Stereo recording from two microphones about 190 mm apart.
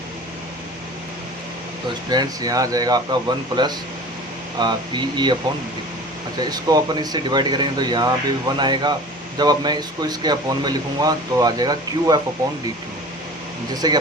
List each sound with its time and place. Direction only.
2.0 s speech: 20° right (ahead or behind)
6.4 s speech: 20° right (ahead or behind)
13.8 s speech: 20° right (ahead or behind)